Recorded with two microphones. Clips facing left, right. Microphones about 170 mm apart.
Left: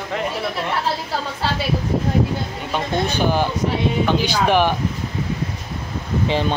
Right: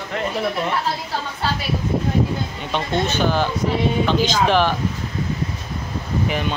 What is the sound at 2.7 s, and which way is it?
Speech, 15° left (ahead or behind).